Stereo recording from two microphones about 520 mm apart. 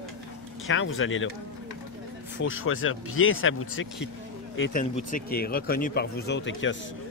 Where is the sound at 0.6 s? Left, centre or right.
Left.